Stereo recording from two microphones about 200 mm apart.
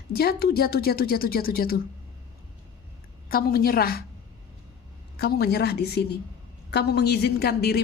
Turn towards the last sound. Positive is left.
turn(degrees=55)  # may be behind; listen again after turning